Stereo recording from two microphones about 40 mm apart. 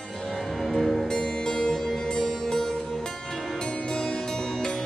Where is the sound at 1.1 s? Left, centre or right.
Centre.